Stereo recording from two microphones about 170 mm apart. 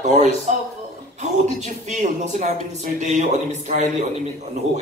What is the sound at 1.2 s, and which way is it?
Speech, 45° right (ahead or behind).